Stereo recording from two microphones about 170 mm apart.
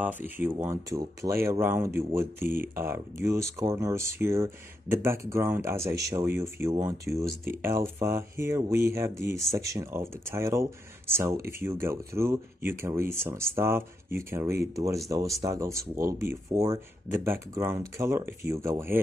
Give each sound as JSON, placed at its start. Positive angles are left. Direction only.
{"t": 0.0, "sound": "speech", "side_deg": -10}